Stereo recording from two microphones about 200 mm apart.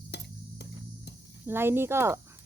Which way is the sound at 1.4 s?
10° right (ahead or behind).